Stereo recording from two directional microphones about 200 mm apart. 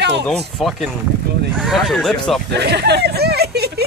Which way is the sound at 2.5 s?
55° right (ahead or behind).